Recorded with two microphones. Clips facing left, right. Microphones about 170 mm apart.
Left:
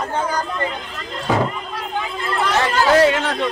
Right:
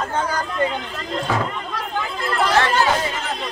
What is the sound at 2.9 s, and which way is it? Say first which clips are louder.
Speech: left 10 dB; 80° left.